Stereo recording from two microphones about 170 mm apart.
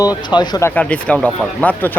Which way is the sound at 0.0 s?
25° left (ahead or behind).